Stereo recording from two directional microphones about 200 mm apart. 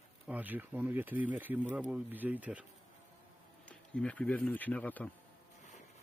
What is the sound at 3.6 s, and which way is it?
Speech, 5° left (ahead or behind).